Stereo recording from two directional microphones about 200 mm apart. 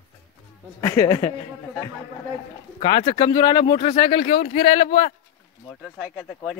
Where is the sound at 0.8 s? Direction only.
15° left (ahead or behind).